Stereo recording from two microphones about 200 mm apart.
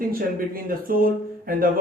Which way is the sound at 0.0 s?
45° right (ahead or behind).